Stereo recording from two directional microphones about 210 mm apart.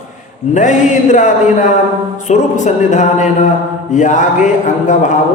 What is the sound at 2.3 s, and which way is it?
A man's voice, 35° left (ahead or behind).